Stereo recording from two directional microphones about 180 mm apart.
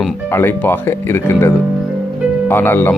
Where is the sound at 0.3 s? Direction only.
10° left (ahead or behind).